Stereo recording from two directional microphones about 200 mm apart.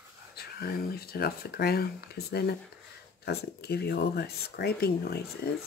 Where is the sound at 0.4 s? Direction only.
50° left (ahead or behind).